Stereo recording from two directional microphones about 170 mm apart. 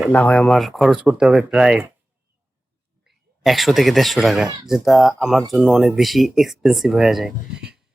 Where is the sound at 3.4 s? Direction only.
Centre (ahead or behind).